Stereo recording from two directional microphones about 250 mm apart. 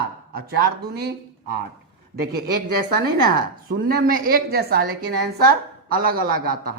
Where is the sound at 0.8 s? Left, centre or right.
Right.